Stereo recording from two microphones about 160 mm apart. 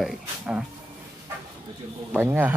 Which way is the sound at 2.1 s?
10° right (ahead or behind).